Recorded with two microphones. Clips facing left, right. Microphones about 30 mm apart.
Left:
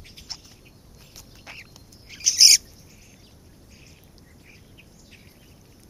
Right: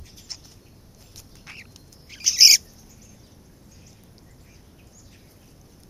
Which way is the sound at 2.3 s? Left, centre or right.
Centre.